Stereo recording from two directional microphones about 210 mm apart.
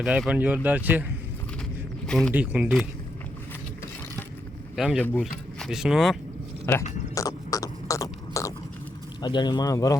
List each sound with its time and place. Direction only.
0.0 s speech: 5° right (ahead or behind)
2.0 s speech: 5° left (ahead or behind)
2.3 s speech: 5° right (ahead or behind)
4.8 s speech: 5° left (ahead or behind)
6.7 s speech: 10° left (ahead or behind)
7.2 s a sound: 15° left (ahead or behind)
9.2 s speech: 20° left (ahead or behind)